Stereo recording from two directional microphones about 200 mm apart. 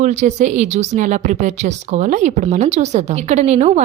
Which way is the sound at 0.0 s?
35° right (ahead or behind).